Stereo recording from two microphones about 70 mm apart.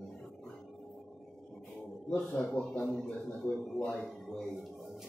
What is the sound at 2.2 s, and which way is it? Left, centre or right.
Speech, centre.